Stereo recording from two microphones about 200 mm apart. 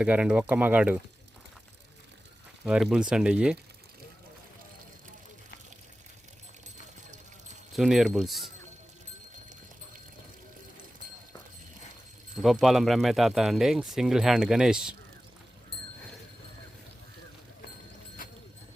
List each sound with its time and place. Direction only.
0.0 s speech: 5° right (ahead or behind)
2.6 s speech: 5° right (ahead or behind)
7.8 s speech: centre (ahead or behind)
12.4 s speech: centre (ahead or behind)
18.2 s a sound: 45° left (ahead or behind)